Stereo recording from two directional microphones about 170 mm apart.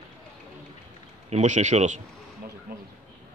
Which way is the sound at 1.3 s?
45° right (ahead or behind).